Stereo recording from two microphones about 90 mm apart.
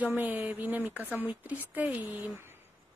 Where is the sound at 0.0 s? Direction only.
20° right (ahead or behind).